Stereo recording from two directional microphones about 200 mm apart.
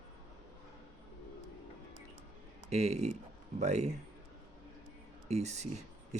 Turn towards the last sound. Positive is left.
turn(degrees=-35)  # may be behind; listen again after turning